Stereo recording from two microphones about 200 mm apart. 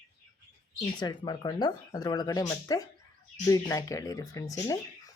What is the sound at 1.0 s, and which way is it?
Speech, 20° left (ahead or behind).